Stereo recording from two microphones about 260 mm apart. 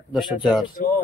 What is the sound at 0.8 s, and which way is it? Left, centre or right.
Speech, left.